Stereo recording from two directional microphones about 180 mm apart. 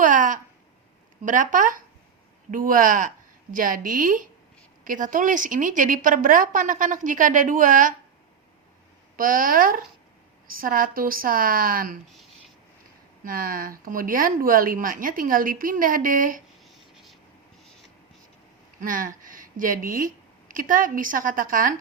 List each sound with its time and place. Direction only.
0.0 s a sound: 45° right (ahead or behind)
1.2 s a woman's voice: 45° right (ahead or behind)
9.1 s a woman's voice: 50° right (ahead or behind)
13.2 s a woman's voice: 55° right (ahead or behind)
16.6 s writing: centre (ahead or behind)
18.8 s speech: 50° right (ahead or behind)